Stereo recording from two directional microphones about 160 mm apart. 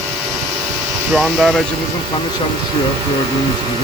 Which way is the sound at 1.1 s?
Centre (ahead or behind).